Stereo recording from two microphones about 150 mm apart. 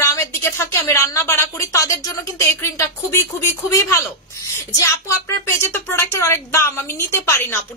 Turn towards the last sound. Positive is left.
turn(degrees=15)  # may be behind; listen again after turning